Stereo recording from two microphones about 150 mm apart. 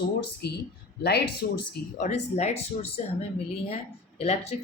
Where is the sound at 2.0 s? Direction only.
50° left (ahead or behind).